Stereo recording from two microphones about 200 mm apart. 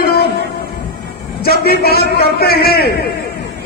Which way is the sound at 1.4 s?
50° left (ahead or behind).